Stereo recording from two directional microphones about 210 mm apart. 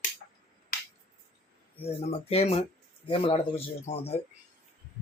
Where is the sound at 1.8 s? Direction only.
30° left (ahead or behind).